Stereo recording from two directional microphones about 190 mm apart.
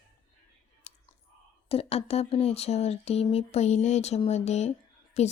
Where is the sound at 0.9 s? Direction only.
35° left (ahead or behind).